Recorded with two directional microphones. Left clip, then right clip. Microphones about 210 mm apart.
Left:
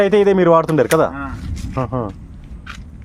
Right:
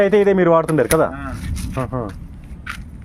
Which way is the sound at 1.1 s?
40° right (ahead or behind).